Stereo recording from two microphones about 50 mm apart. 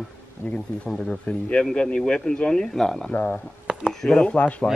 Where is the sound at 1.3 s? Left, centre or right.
Left; by 3.1 s centre.